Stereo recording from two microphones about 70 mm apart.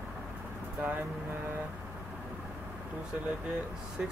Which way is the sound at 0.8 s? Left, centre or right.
Right.